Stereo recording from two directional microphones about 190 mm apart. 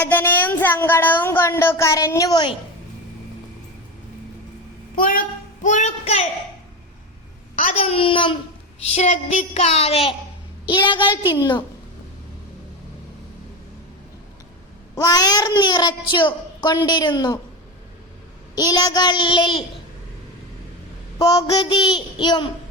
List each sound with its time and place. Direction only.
0.0 s child singing: 10° left (ahead or behind)
4.9 s a child's voice: 45° left (ahead or behind)
7.5 s a woman's voice: 30° left (ahead or behind)
14.9 s a child's voice: 20° left (ahead or behind)
18.5 s a child's voice: 20° left (ahead or behind)
21.2 s a child's voice: 20° left (ahead or behind)